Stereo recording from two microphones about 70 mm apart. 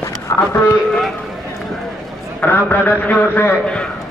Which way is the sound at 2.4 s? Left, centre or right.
Left.